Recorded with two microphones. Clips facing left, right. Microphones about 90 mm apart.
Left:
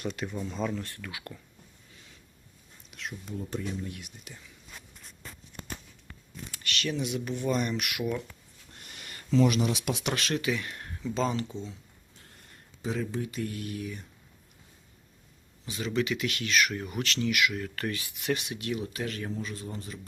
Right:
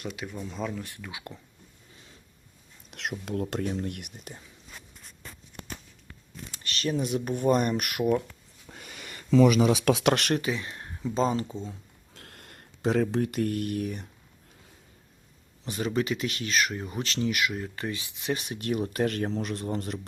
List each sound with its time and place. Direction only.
0.0 s speech: 5° right (ahead or behind)
0.9 s speech: 15° right (ahead or behind)
2.9 s speech: 85° right; by 4.4 s 55° right (ahead or behind)
6.5 s speech: 35° right (ahead or behind)
9.9 s speech: 80° right; by 10.4 s 60° right (ahead or behind)
10.4 s speech: 30° right (ahead or behind)
11.0 s speech: 40° right (ahead or behind)
12.1 s a sound: 75° right (ahead or behind)
13.1 s speech: 60° right (ahead or behind)
15.6 s speech: 45° right (ahead or behind)
17.7 s speech: 20° right (ahead or behind)
18.3 s speech: 40° right (ahead or behind); by 20.0 s 65° right (ahead or behind)